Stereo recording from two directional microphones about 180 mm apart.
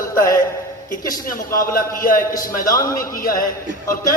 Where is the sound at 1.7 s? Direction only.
50° left (ahead or behind).